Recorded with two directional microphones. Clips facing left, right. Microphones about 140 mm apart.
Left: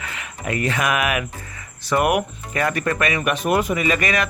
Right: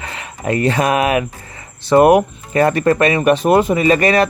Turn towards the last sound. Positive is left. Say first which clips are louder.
# right 8 dB
turn(degrees=-35)  # may be behind; listen again after turning